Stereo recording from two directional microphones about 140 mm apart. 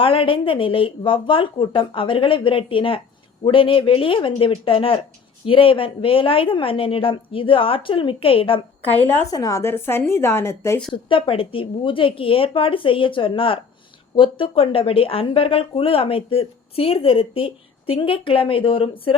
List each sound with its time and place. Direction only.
0.0 s speech: 40° left (ahead or behind)
9.3 s a woman's voice: 25° left (ahead or behind)
10.9 s speech: 40° left (ahead or behind)